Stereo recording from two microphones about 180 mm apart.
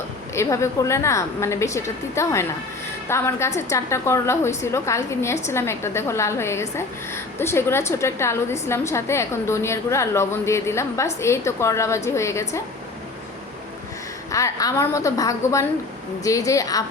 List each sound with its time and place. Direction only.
0.3 s a woman's voice: 15° left (ahead or behind)
14.3 s a woman's voice: 15° left (ahead or behind)